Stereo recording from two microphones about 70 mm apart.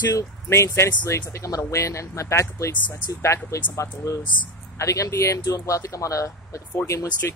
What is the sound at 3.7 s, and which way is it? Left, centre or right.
Speech, left.